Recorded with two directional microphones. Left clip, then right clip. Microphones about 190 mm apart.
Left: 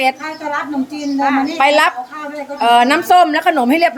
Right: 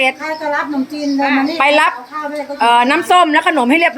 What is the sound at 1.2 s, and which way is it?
Speech, 35° left (ahead or behind).